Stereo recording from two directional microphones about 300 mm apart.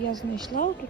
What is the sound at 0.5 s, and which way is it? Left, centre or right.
Speech, left.